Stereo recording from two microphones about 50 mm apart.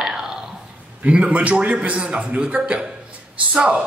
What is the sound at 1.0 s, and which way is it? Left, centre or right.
A man's voice, right.